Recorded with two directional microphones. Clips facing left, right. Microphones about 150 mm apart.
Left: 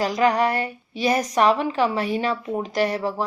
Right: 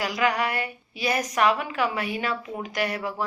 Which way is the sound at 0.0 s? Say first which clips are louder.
Left 5 dB; 35° left (ahead or behind).